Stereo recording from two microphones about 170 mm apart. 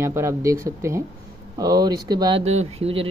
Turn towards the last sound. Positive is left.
turn(degrees=-35)  # may be behind; listen again after turning